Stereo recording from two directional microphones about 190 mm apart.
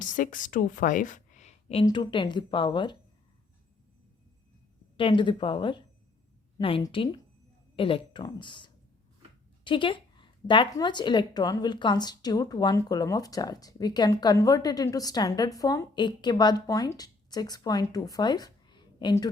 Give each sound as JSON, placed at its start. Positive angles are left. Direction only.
{"t": 0.0, "sound": "speech", "side_deg": 45}
{"t": 1.8, "sound": "speech", "side_deg": 25}
{"t": 4.9, "sound": "a woman's voice", "side_deg": 25}